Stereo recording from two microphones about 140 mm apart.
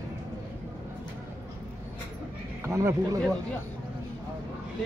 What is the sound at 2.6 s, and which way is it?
Speech, 20° right (ahead or behind).